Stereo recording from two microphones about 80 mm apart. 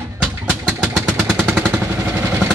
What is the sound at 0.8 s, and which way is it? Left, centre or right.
Vehicle, centre.